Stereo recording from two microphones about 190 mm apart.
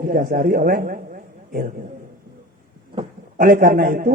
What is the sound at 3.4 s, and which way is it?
Speech, 50° right (ahead or behind).